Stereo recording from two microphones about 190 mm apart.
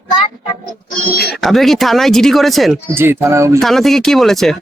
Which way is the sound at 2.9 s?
10° right (ahead or behind).